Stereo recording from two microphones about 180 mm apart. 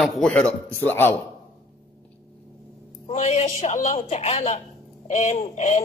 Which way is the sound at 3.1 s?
40° left (ahead or behind).